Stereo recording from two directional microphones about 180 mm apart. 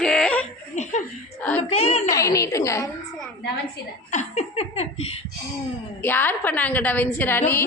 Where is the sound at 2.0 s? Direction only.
15° left (ahead or behind).